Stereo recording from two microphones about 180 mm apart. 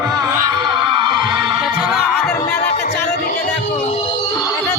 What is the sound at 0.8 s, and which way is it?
Music, 25° right (ahead or behind).